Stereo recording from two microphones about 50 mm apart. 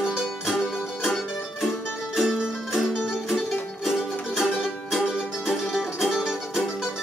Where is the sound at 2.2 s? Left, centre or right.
Centre.